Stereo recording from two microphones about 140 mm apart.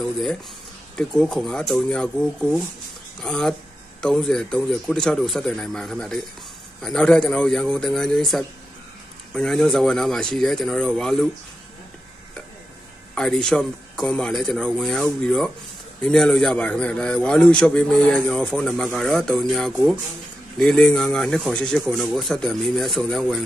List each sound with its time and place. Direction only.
0.9 s speech: 5° left (ahead or behind)
13.1 s a man's voice: 5° left (ahead or behind)